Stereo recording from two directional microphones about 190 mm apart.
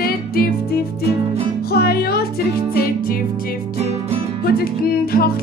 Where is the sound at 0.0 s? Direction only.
55° left (ahead or behind).